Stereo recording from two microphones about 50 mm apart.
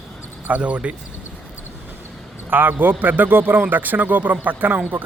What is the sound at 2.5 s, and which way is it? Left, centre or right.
A man's voice, right.